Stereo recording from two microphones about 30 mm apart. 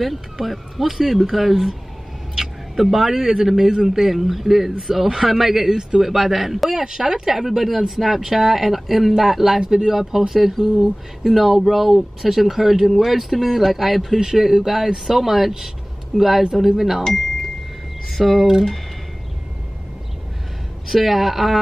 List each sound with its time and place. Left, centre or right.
0.0 s speech: centre
5.8 s speech: right
6.0 s speech: centre
9.6 s speech: right
9.8 s speech: centre
18.1 s speech: centre
20.9 s speech: centre